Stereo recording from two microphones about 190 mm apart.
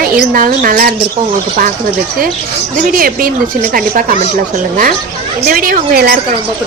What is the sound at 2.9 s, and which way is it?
A woman's voice, 50° right (ahead or behind).